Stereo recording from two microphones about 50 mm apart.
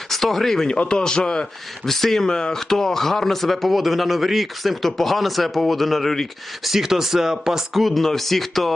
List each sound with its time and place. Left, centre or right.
0.1 s a man's voice: centre
1.9 s speech: centre
6.7 s speech: centre